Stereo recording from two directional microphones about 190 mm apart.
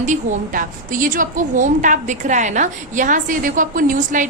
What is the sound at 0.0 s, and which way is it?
A woman's voice, 40° right (ahead or behind).